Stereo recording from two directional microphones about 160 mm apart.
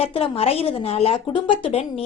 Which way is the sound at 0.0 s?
40° left (ahead or behind).